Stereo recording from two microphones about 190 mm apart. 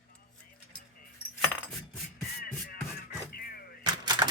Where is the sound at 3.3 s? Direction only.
50° left (ahead or behind).